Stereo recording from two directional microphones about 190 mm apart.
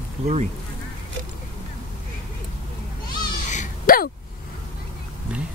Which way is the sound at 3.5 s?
45° left (ahead or behind).